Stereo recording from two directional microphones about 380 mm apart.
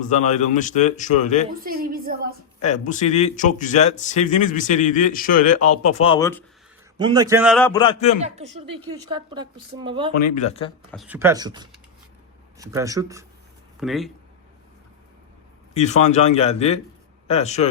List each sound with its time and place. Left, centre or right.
0.5 s speech: centre
1.6 s a sound: right
2.6 s speech: centre
7.0 s a man's voice: centre
8.2 s a woman's voice: centre
10.3 s speech: centre
10.9 s a woman's voice: centre
15.7 s a man's voice: centre